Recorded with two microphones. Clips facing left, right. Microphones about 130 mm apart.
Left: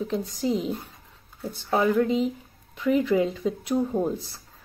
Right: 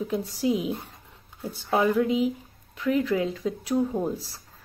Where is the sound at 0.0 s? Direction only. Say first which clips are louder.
Right 1 dB; 5° right (ahead or behind).